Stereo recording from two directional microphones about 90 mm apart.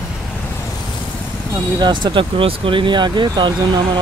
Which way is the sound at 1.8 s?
60° right (ahead or behind).